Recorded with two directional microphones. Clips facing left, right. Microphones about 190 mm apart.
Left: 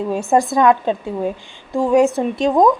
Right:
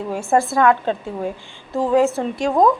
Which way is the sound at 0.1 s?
20° left (ahead or behind).